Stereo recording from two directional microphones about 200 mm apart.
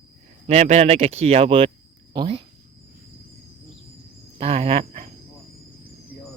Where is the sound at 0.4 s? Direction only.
35° right (ahead or behind).